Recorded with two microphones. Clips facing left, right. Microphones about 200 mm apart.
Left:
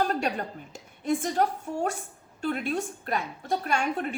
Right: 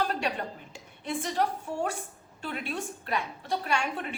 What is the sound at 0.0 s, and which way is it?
A woman's voice, 45° left (ahead or behind).